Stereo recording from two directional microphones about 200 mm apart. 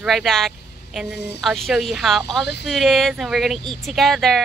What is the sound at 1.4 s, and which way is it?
Speech, centre (ahead or behind).